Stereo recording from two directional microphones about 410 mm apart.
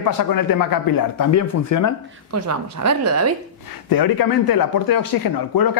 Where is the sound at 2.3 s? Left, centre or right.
Right.